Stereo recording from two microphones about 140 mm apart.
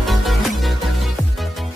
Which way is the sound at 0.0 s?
Centre (ahead or behind).